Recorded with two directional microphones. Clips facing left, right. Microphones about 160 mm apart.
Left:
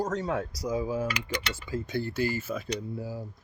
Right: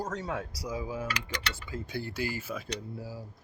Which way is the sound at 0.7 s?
40° left (ahead or behind).